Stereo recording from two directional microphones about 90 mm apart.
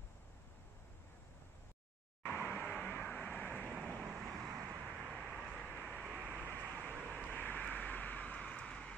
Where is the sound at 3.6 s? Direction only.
10° right (ahead or behind); by 5.8 s 10° left (ahead or behind).